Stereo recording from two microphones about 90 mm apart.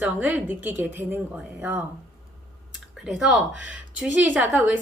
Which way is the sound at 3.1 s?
5° right (ahead or behind).